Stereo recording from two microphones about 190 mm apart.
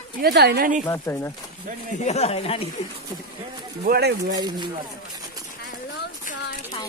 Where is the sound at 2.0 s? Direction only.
35° left (ahead or behind).